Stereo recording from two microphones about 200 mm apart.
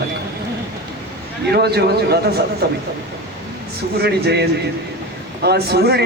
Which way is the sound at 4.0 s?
55° right (ahead or behind).